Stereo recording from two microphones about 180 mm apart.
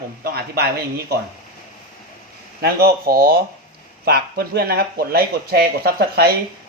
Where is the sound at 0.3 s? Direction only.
60° right (ahead or behind).